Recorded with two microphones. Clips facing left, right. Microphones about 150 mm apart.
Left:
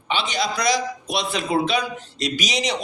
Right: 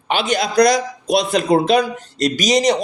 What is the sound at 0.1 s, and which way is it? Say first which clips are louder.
A man's voice: right 5 dB; 50° right (ahead or behind).